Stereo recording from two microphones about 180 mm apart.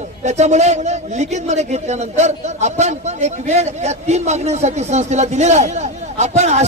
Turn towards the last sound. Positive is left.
turn(degrees=-40)  # may be behind; listen again after turning